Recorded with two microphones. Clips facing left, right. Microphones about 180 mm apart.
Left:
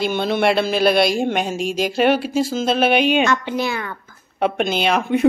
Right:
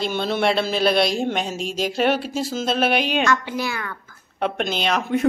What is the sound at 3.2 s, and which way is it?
Speech, 20° left (ahead or behind).